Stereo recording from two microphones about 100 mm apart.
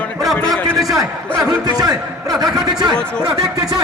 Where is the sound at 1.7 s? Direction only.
40° right (ahead or behind).